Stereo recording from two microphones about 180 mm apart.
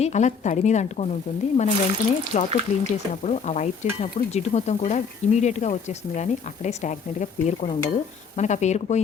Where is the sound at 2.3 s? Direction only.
40° left (ahead or behind).